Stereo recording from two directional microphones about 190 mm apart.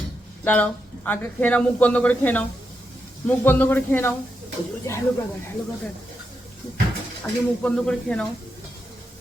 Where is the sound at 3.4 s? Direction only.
10° left (ahead or behind).